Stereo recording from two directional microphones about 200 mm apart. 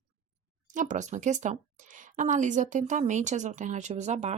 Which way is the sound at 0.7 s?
40° right (ahead or behind).